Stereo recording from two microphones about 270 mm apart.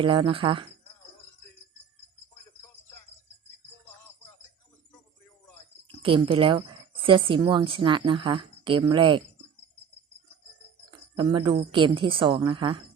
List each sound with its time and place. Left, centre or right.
0.0 s speech: centre
6.0 s speech: centre
11.2 s speech: centre